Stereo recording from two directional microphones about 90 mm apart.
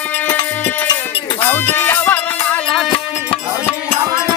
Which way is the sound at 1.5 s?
25° left (ahead or behind).